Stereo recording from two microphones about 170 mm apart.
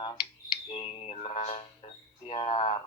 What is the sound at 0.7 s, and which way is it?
Mantra, 35° left (ahead or behind).